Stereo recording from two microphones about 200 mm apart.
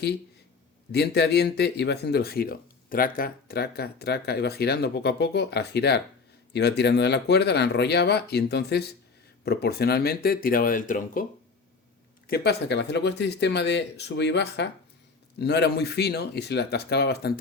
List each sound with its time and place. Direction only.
0.9 s speech: 55° left (ahead or behind)
12.3 s speech: 55° left (ahead or behind)